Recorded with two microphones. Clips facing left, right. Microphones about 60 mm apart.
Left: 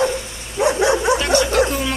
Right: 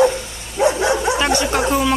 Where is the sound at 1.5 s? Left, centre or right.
Centre.